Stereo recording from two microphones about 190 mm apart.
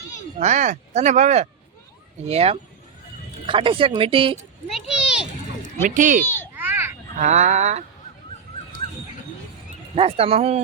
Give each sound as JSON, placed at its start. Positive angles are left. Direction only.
{"t": 0.3, "sound": "speech", "side_deg": -40}
{"t": 4.7, "sound": "a sound", "side_deg": -5}
{"t": 5.8, "sound": "speech", "side_deg": -45}
{"t": 6.2, "sound": "children playing", "side_deg": 10}
{"t": 6.6, "sound": "children playing", "side_deg": -10}
{"t": 7.2, "sound": "speech", "side_deg": -40}
{"t": 9.9, "sound": "speech", "side_deg": -30}